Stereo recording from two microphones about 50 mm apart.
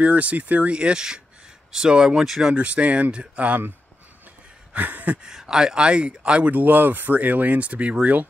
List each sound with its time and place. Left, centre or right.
0.0 s speech: right; by 2.5 s centre
2.5 s speech: right
4.7 s speech: right
5.2 s speech: centre
6.5 s speech: right